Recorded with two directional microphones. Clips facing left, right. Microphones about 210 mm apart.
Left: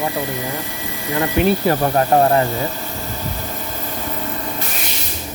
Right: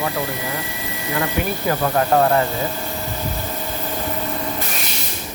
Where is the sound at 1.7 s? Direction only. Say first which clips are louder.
Left 2 dB; 30° left (ahead or behind).